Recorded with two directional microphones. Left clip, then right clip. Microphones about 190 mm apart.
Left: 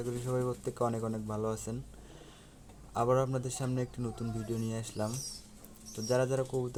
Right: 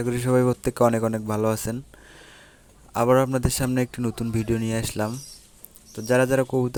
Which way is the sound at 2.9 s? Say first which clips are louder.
Right 10 dB; 45° right (ahead or behind).